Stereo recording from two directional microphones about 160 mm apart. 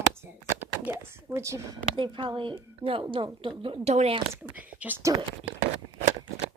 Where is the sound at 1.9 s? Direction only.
30° right (ahead or behind).